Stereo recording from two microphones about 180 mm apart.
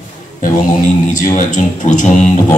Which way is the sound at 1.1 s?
45° left (ahead or behind).